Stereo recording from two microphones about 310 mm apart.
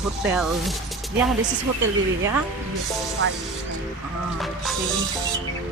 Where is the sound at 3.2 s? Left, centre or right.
Right.